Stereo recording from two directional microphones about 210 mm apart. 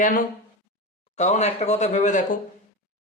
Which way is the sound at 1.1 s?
35° left (ahead or behind).